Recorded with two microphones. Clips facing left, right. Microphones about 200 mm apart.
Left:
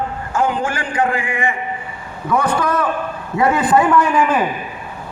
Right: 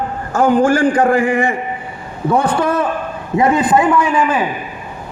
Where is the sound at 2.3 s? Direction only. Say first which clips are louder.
Right 2 dB; 30° right (ahead or behind); by 4.4 s 10° right (ahead or behind).